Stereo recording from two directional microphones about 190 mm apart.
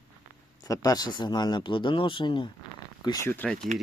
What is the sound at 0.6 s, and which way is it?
Speech, 20° left (ahead or behind).